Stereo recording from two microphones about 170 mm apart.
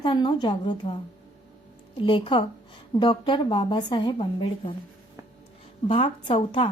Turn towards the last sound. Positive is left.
turn(degrees=30)  # may be behind; listen again after turning